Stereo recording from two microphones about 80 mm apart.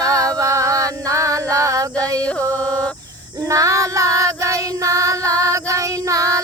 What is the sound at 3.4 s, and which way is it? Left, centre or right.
Child singing, right.